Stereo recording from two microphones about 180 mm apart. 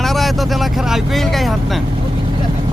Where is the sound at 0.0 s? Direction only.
Centre (ahead or behind).